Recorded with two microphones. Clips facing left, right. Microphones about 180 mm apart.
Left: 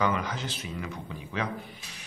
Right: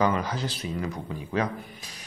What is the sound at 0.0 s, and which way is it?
Speech, 35° right (ahead or behind).